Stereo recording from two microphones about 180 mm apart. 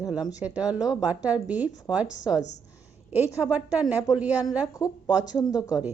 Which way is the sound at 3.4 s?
5° right (ahead or behind).